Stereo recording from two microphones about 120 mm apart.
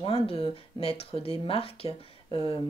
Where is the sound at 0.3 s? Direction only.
50° left (ahead or behind).